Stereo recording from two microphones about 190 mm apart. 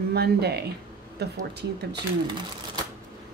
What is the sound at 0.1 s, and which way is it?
A woman's voice, 60° right (ahead or behind).